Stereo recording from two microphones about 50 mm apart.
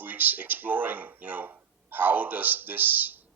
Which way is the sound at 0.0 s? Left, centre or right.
Right.